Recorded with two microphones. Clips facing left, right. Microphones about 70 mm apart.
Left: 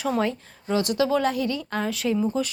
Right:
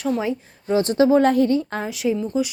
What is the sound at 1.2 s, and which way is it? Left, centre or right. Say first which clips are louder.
Speech: right 8 dB; right.